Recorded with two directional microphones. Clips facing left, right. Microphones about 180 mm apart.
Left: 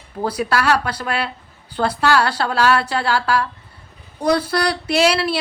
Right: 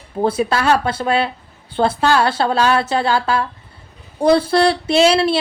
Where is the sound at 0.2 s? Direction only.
25° right (ahead or behind).